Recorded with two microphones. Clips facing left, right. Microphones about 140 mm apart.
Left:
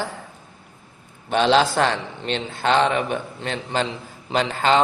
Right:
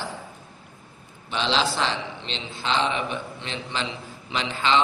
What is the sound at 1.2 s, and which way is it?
A man's voice, 50° left (ahead or behind).